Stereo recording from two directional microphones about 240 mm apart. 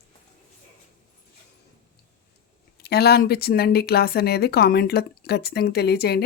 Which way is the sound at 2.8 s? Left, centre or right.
Left.